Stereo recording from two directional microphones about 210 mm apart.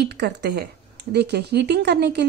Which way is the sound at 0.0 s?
50° right (ahead or behind).